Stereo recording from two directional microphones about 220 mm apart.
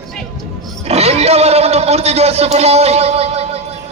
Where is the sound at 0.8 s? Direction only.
30° right (ahead or behind).